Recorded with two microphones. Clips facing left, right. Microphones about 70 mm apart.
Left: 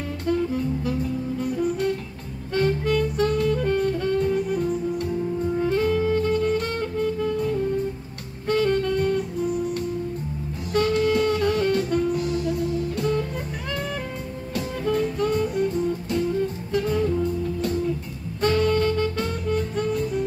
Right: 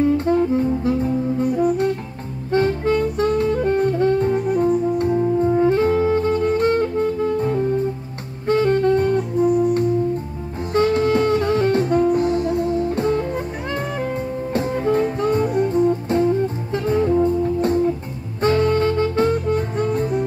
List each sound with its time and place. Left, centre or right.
0.2 s saxophone: right
10.7 s saxophone: right
14.5 s music: right